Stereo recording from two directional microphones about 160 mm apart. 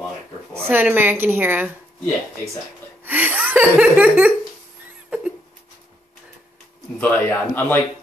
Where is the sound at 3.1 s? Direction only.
10° right (ahead or behind).